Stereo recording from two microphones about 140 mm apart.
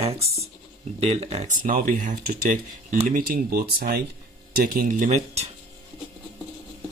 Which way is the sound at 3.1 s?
90° right.